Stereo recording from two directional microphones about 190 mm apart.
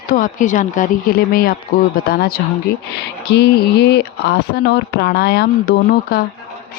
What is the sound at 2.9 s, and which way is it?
Speech, 60° left (ahead or behind).